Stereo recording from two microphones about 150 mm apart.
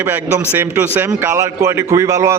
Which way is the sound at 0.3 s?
15° right (ahead or behind).